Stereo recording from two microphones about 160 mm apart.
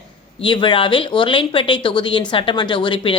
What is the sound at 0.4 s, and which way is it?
Speech, 30° left (ahead or behind).